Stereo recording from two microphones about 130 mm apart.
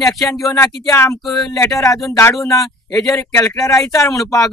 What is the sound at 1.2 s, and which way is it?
Speech, centre (ahead or behind).